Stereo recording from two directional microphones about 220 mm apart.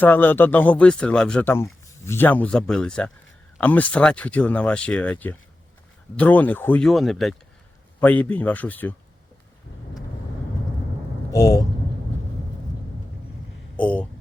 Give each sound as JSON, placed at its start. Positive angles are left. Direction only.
{"t": 0.0, "sound": "a man's voice", "side_deg": 10}
{"t": 11.3, "sound": "a man's voice", "side_deg": 15}
{"t": 13.7, "sound": "a sound", "side_deg": 5}